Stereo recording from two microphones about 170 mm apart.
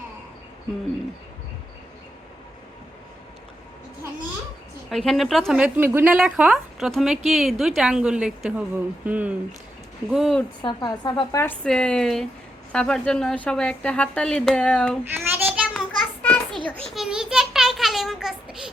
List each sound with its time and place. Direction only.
4.9 s a woman's voice: centre (ahead or behind)
10.6 s a woman's voice: 25° left (ahead or behind)
11.6 s a woman's voice: 5° left (ahead or behind)
15.1 s child singing: 10° right (ahead or behind)
15.7 s a sound: 5° left (ahead or behind)